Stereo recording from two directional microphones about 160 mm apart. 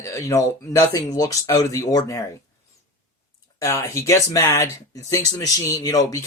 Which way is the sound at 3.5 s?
20° left (ahead or behind).